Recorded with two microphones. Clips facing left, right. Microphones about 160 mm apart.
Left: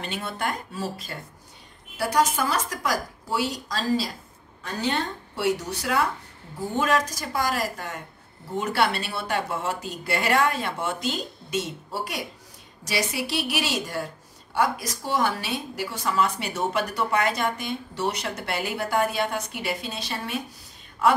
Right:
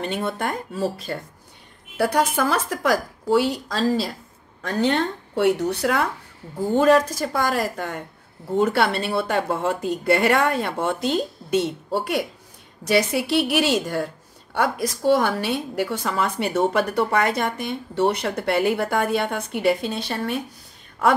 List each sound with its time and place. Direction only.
0.0 s speech: 45° right (ahead or behind)
2.0 s a woman's voice: 60° right (ahead or behind)